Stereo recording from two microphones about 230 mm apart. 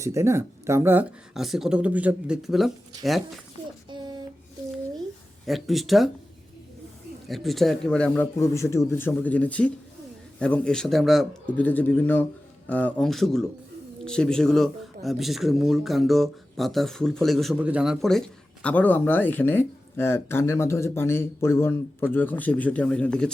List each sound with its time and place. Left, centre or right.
0.0 s speech: centre
3.8 s child singing: centre
5.5 s speech: centre
7.3 s speech: centre